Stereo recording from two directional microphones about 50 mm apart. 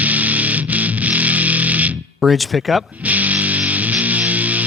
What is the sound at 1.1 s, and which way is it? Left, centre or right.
Music, right.